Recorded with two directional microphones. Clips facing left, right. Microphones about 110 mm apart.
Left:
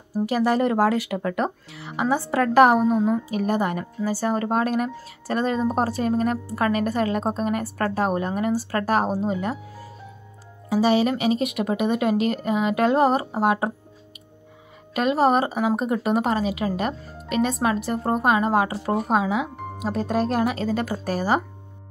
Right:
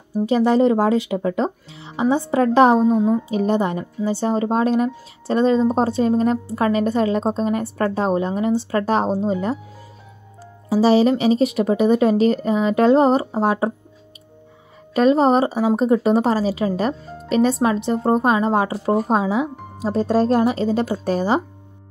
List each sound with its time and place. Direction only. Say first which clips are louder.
0.3 s a woman's voice: right 6 dB; 25° right (ahead or behind)
10.7 s speech: right 5 dB; 30° right (ahead or behind)
15.0 s a woman's voice: right 5 dB; 30° right (ahead or behind)